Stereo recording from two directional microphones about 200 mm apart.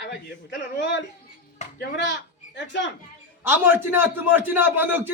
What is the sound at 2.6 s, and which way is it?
Speech, 65° left (ahead or behind).